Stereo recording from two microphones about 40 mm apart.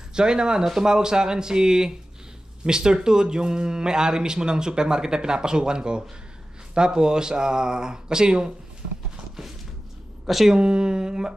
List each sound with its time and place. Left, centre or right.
0.1 s speech: centre
10.2 s a woman's voice: centre
10.5 s speech: right